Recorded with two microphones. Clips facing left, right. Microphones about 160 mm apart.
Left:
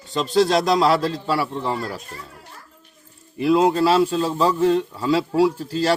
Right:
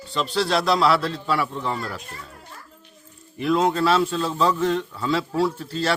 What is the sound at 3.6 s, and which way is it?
Speech, 35° left (ahead or behind).